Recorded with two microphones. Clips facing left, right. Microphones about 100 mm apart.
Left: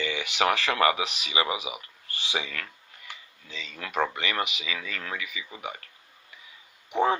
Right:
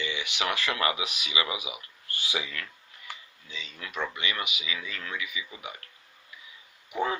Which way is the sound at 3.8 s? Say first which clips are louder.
Left 6 dB; 55° left (ahead or behind).